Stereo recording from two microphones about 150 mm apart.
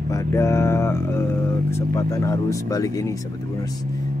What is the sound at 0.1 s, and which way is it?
Speech, 20° left (ahead or behind).